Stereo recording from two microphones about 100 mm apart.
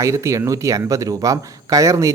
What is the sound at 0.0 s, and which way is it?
Speech, 30° right (ahead or behind).